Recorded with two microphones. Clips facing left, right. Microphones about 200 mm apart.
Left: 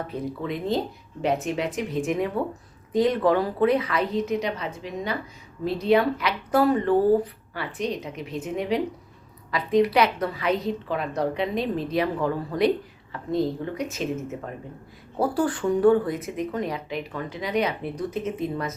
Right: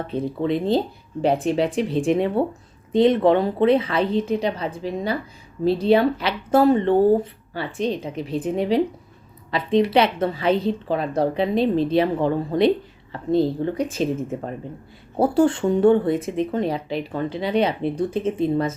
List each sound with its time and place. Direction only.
0.1 s speech: 30° right (ahead or behind)